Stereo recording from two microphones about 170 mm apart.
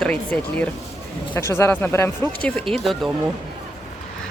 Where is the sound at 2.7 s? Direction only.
Centre (ahead or behind).